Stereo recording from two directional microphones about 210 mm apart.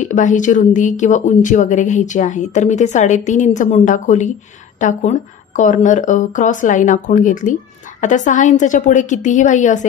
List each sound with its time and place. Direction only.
0.0 s speech: 35° left (ahead or behind)